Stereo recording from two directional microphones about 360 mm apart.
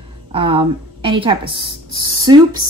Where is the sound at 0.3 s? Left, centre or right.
Centre.